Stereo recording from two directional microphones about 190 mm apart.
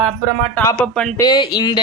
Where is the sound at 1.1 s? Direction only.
20° left (ahead or behind).